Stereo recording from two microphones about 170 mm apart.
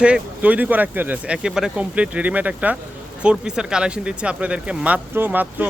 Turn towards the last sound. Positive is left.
turn(degrees=-10)  # may be behind; listen again after turning